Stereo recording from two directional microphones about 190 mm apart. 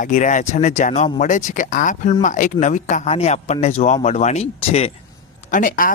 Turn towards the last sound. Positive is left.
turn(degrees=45)  # may be behind; listen again after turning